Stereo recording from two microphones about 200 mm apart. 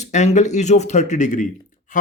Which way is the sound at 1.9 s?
40° left (ahead or behind).